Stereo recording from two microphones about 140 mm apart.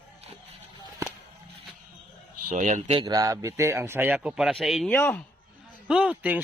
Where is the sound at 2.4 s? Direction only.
65° right (ahead or behind).